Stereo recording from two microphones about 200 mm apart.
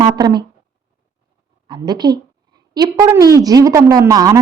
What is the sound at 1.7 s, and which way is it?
A woman's voice, 20° right (ahead or behind).